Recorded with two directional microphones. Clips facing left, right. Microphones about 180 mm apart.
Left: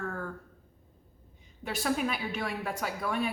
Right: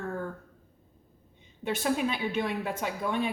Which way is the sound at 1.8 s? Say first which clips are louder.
Right 1 dB; 25° right (ahead or behind).